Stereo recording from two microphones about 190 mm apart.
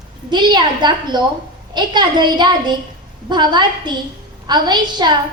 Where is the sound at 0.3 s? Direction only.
25° right (ahead or behind).